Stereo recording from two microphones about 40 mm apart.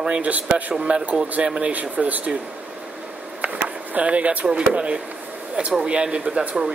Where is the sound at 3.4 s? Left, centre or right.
Right.